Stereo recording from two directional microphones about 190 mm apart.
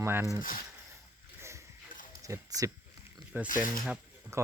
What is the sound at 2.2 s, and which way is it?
Speech, 15° right (ahead or behind).